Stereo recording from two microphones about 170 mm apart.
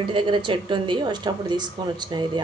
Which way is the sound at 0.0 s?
30° right (ahead or behind).